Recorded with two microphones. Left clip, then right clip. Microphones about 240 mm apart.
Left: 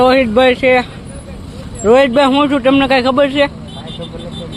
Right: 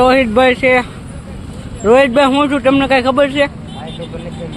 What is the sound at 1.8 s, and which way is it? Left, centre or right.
Speech, centre.